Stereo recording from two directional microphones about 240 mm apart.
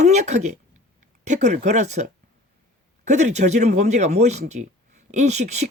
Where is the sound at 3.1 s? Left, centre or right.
Right.